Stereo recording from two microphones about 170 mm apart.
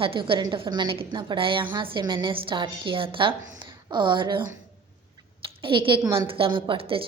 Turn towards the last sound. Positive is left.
turn(degrees=-35)  # may be behind; listen again after turning